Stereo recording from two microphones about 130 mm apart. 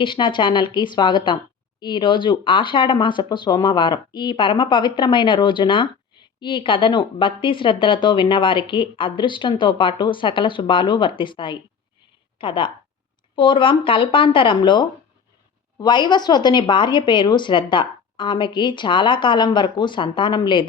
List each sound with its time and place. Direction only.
0.0 s speech: 40° left (ahead or behind)